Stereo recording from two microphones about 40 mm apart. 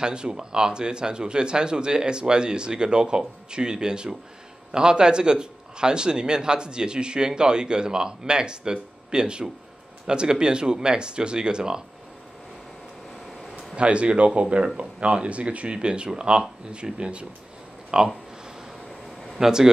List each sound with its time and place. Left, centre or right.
0.0 s speech: right
13.7 s speech: right
19.2 s speech: centre